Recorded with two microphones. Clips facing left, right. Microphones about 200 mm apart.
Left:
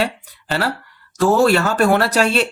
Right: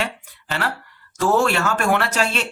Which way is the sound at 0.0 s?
35° left (ahead or behind).